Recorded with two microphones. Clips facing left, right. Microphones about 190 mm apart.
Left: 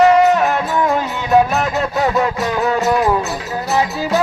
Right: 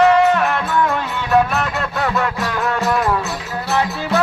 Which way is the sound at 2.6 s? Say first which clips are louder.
Left 3 dB; 35° left (ahead or behind).